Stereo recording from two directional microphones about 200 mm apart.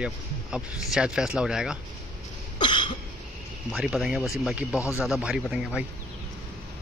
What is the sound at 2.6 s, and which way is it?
Cough, 25° left (ahead or behind).